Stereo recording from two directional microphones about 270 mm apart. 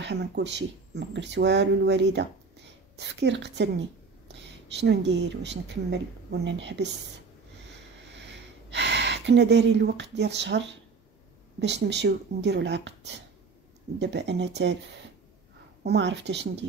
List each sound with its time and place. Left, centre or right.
0.0 s speech: right
8.1 s a sound: right
11.6 s speech: right
15.8 s speech: right